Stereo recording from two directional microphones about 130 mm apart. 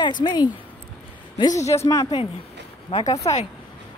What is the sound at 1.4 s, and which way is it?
Speech, 25° left (ahead or behind).